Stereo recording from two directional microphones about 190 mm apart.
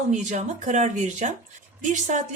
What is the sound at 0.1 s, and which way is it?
A woman's voice, 40° right (ahead or behind).